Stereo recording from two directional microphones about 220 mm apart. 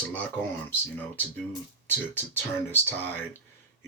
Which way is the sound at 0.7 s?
10° left (ahead or behind).